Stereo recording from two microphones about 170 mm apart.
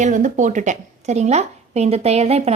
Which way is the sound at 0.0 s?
45° right (ahead or behind).